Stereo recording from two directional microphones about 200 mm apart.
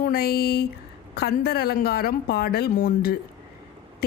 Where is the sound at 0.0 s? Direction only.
50° left (ahead or behind).